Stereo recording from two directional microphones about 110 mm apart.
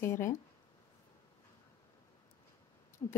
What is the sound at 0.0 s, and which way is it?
Speech, 25° left (ahead or behind).